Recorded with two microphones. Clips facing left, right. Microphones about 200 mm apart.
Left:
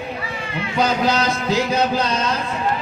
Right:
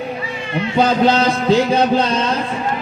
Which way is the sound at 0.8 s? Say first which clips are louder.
Right 5 dB; 30° right (ahead or behind).